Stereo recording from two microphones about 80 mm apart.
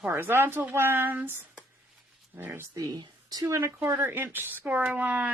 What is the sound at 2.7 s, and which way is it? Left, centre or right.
Speech, right.